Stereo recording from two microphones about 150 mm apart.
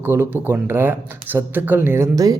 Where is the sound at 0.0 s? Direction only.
15° right (ahead or behind).